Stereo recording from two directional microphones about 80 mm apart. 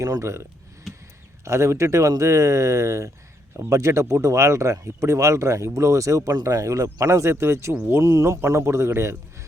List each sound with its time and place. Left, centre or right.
0.0 s speech: right
1.5 s speech: right